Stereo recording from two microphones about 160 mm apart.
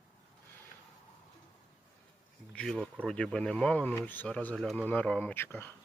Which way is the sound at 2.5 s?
5° left (ahead or behind).